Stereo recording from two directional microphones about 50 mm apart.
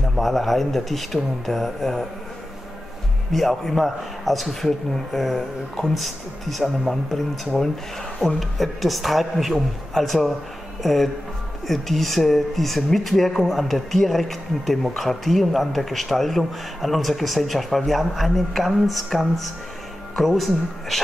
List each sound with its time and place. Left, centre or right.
0.1 s speech: centre
3.3 s speech: centre